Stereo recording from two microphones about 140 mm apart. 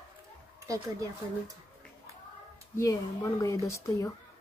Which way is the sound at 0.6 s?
25° right (ahead or behind).